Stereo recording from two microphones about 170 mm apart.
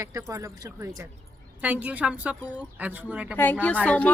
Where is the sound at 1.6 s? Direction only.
10° right (ahead or behind).